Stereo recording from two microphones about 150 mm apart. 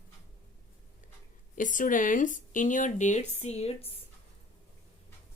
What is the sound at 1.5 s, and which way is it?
Speech, 60° left (ahead or behind).